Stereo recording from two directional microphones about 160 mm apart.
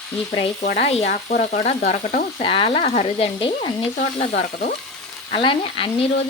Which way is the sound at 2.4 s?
35° left (ahead or behind).